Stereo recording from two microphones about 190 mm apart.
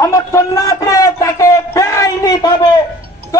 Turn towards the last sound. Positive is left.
turn(degrees=20)  # may be behind; listen again after turning